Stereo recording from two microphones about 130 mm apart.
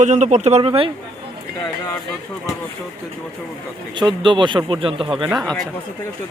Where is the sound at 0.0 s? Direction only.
65° right (ahead or behind); by 0.9 s 45° right (ahead or behind).